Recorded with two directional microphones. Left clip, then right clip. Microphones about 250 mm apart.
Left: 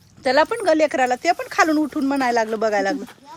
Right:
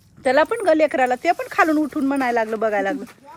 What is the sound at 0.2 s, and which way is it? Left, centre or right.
Speech, centre.